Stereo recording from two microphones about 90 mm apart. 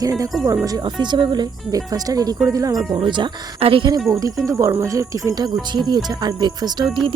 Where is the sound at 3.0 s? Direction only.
60° right (ahead or behind).